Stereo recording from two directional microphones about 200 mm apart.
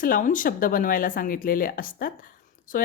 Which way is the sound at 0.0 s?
40° left (ahead or behind).